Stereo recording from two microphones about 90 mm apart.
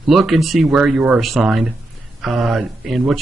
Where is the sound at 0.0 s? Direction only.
Centre (ahead or behind).